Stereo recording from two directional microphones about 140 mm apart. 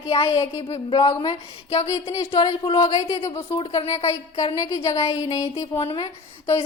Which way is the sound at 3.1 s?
20° left (ahead or behind).